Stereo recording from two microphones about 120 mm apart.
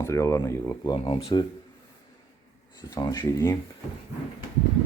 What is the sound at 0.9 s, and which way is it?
Speech, 50° left (ahead or behind).